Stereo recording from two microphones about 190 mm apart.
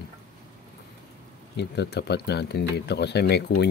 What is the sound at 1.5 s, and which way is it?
Speech, 60° left (ahead or behind).